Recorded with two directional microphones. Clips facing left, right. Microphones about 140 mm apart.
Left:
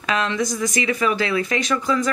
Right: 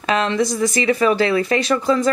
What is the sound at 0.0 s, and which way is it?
Speech, 30° right (ahead or behind).